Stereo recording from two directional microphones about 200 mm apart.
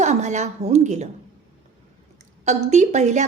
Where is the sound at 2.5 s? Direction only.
35° right (ahead or behind).